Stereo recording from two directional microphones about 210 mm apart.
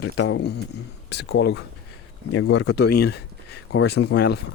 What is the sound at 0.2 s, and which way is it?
Speech, 55° left (ahead or behind).